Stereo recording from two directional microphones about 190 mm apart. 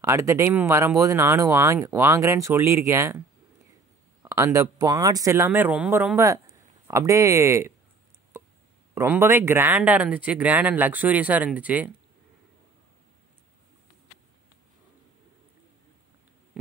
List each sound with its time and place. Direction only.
0.0 s speech: 15° right (ahead or behind)
4.2 s speech: 15° right (ahead or behind)
8.3 s a sound: 15° right (ahead or behind)
8.9 s speech: 15° right (ahead or behind)